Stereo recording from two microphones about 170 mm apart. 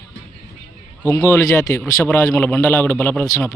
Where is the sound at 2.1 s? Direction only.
10° left (ahead or behind).